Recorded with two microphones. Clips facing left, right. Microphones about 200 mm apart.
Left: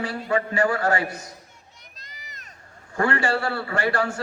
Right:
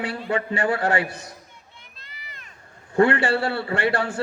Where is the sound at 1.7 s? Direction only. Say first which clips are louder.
Right 1 dB; 40° left (ahead or behind).